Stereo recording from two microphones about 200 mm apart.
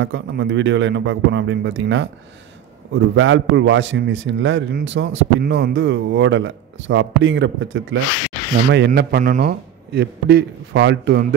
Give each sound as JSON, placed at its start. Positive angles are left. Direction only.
{"t": 0.0, "sound": "a man's voice", "side_deg": -65}
{"t": 8.7, "sound": "a man's voice", "side_deg": -55}